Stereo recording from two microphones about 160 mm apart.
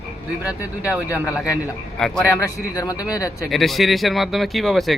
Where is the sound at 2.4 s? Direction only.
20° left (ahead or behind).